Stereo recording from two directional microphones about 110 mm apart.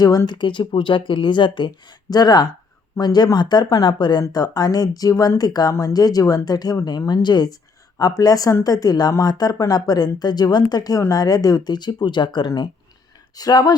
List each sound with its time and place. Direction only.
0.3 s speech: 45° left (ahead or behind)